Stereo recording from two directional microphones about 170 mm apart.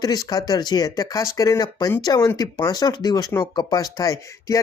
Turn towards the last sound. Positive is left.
turn(degrees=20)  # may be behind; listen again after turning